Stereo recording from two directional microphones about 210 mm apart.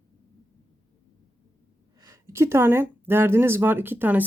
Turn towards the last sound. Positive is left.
turn(degrees=-10)  # may be behind; listen again after turning